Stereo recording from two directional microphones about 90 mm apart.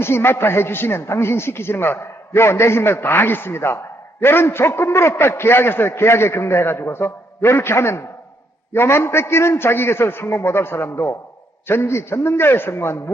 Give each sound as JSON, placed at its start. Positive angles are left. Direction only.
{"t": 0.0, "sound": "a man's voice", "side_deg": 25}